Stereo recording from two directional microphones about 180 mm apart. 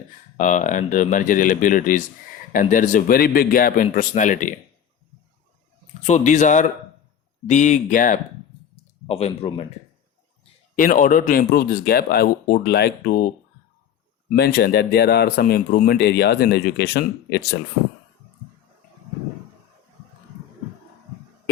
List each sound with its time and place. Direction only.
0.3 s speech: 45° left (ahead or behind)
6.0 s a man's voice: 40° left (ahead or behind)
8.7 s a sound: 35° left (ahead or behind)
10.8 s speech: 50° left (ahead or behind)
14.3 s speech: 60° left (ahead or behind)